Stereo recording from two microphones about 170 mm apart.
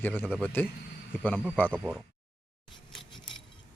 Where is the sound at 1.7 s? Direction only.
5° right (ahead or behind).